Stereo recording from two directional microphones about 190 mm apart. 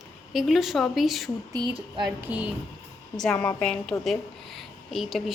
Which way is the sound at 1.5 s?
20° right (ahead or behind).